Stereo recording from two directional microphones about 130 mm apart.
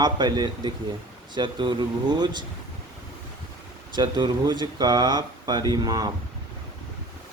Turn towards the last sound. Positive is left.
turn(degrees=-30)  # may be behind; listen again after turning